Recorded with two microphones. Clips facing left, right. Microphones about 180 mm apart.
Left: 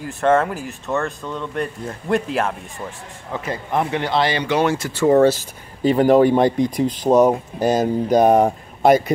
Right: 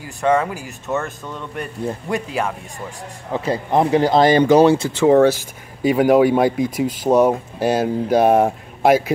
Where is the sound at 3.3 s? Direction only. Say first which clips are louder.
Right 5 dB; 30° right (ahead or behind).